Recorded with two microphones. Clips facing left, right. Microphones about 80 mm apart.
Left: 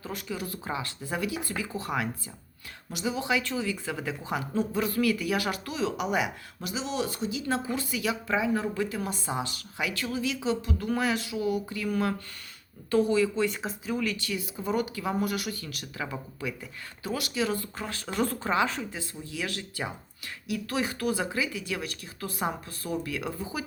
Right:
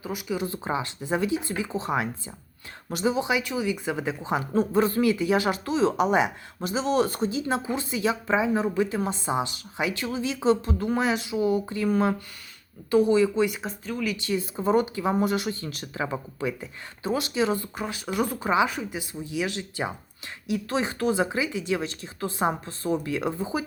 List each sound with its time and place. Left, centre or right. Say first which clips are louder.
0.0 s speech: right 5 dB; centre
2.9 s speech: right 6 dB; right
3.2 s speech: right 3 dB; centre
4.5 s speech: right 6 dB; right
7.4 s speech: right 2 dB; right
10.4 s speech: right 6 dB; right; by 13.6 s centre
13.6 s speech: left 1 dB; centre
14.2 s speech: right 6 dB; right